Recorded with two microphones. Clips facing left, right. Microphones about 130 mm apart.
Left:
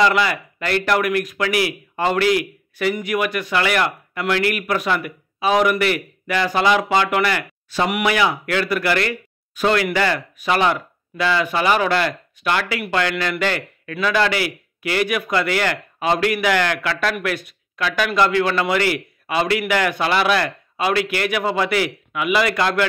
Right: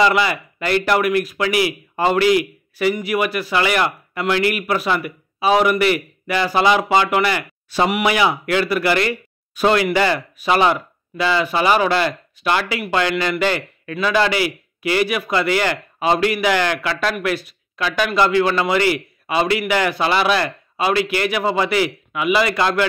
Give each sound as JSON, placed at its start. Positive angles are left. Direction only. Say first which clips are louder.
{"t": 0.0, "sound": "a man's voice", "louder": "right 1 dB", "side_deg": -5}